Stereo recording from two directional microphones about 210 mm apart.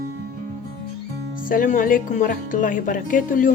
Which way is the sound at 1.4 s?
40° left (ahead or behind).